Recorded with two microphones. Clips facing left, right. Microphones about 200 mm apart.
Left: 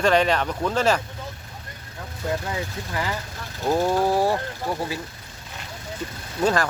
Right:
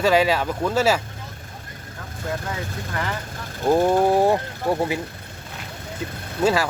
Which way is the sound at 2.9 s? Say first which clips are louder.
Even; 5° left (ahead or behind).